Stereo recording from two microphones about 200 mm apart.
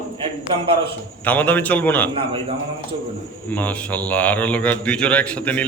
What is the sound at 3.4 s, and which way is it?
A man's voice, 10° left (ahead or behind).